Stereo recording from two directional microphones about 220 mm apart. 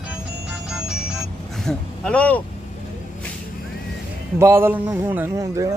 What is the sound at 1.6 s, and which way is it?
Speech, 5° left (ahead or behind).